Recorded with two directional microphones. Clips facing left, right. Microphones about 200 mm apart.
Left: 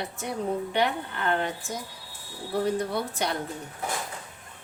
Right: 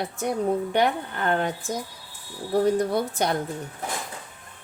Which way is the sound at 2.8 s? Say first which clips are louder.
Right 5 dB; 45° right (ahead or behind).